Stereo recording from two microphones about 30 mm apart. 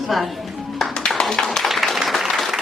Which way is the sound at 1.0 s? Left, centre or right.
Left.